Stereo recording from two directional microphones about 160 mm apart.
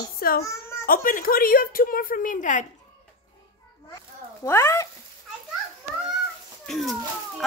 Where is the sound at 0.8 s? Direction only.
60° left (ahead or behind).